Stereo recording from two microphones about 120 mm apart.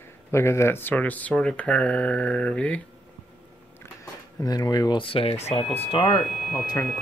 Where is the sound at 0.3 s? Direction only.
20° left (ahead or behind).